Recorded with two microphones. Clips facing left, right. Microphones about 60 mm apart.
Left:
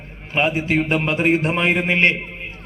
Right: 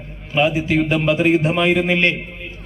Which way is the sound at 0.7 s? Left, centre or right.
Left.